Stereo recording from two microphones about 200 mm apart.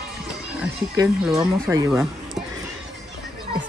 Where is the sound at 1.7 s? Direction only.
15° right (ahead or behind).